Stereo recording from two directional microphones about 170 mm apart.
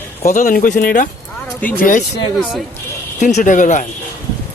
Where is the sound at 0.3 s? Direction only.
55° left (ahead or behind).